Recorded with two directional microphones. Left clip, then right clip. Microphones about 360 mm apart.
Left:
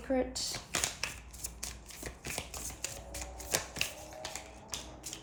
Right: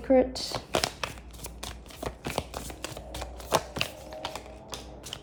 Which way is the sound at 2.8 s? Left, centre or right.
Centre.